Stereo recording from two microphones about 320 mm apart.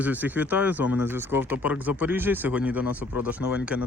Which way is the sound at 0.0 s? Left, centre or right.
Centre.